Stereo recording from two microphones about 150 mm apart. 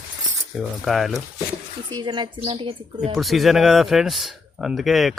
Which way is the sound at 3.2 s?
Centre (ahead or behind).